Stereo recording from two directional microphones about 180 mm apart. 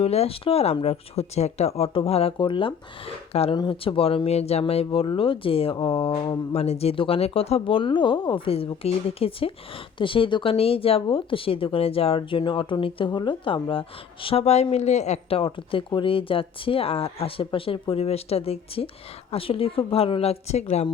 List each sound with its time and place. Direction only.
0.0 s speech: 35° left (ahead or behind)